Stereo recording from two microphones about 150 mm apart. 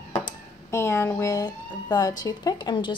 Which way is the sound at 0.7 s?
20° left (ahead or behind).